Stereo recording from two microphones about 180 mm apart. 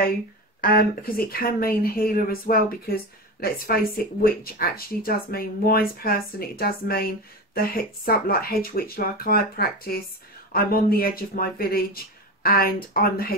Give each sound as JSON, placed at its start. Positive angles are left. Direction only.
{"t": 0.6, "sound": "speech", "side_deg": 55}